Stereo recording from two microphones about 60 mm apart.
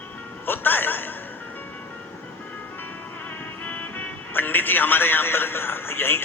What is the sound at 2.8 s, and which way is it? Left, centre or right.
Music, left.